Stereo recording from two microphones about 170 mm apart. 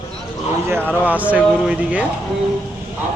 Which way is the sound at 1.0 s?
10° right (ahead or behind).